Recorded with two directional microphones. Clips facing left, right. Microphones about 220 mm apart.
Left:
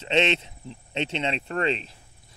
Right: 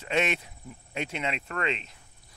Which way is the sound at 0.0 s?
25° left (ahead or behind).